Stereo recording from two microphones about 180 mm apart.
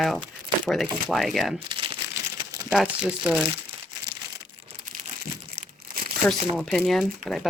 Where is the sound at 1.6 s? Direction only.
30° right (ahead or behind).